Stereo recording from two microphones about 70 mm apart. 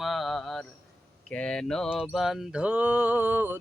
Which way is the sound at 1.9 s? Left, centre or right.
Centre.